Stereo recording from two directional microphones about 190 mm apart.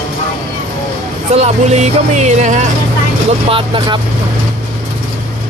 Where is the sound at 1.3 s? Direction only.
35° right (ahead or behind).